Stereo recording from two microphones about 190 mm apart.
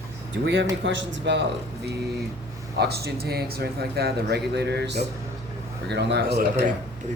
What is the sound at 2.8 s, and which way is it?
Speech, 55° right (ahead or behind).